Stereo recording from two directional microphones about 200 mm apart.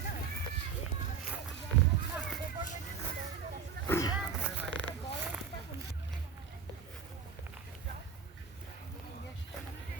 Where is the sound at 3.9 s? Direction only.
15° left (ahead or behind).